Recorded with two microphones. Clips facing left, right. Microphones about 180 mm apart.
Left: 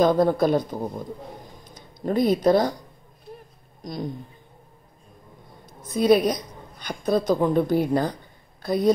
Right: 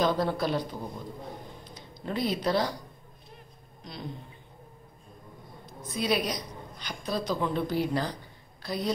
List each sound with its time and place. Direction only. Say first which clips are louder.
0.0 s a woman's voice: left 8 dB; 50° left (ahead or behind)
3.8 s a woman's voice: left 9 dB; 45° left (ahead or behind)
5.9 s a woman's voice: left 10 dB; 50° left (ahead or behind)